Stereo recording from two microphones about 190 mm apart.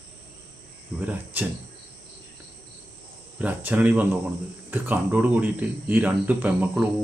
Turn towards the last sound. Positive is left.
turn(degrees=-10)  # may be behind; listen again after turning